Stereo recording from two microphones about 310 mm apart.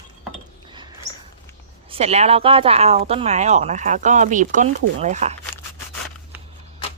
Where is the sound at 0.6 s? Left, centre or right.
Centre.